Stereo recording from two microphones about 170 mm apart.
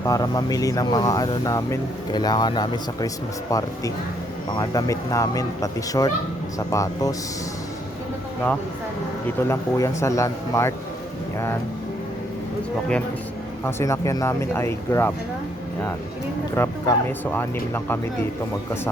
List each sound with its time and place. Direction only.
0.0 s speech: 20° left (ahead or behind)
9.5 s speech: 15° left (ahead or behind)
13.7 s speech: 15° left (ahead or behind)
16.6 s speech: 15° left (ahead or behind)